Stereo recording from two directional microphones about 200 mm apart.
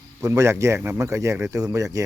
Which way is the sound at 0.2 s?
15° right (ahead or behind).